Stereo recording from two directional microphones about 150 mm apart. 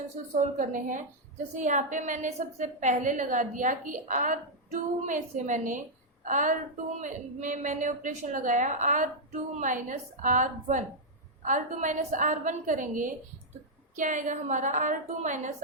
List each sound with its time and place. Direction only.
0.3 s a woman's voice: 60° right (ahead or behind)